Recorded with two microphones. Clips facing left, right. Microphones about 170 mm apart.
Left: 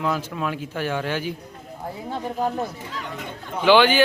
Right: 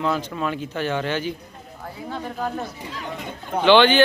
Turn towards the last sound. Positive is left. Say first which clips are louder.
# right 1 dB
turn(degrees=5)  # may be behind; listen again after turning